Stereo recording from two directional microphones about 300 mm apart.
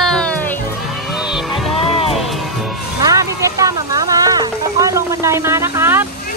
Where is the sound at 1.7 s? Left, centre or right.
Centre.